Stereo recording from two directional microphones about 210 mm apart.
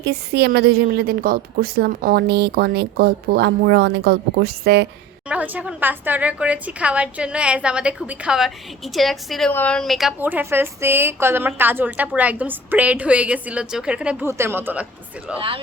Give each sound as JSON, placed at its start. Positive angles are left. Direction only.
{"t": 0.0, "sound": "a woman's voice", "side_deg": -50}
{"t": 5.3, "sound": "a woman's voice", "side_deg": -5}
{"t": 15.4, "sound": "speech", "side_deg": -25}